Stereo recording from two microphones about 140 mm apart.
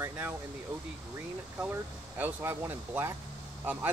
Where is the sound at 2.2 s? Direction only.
15° right (ahead or behind).